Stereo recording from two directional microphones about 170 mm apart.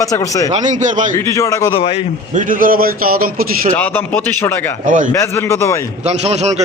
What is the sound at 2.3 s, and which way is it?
A man's voice, 55° right (ahead or behind).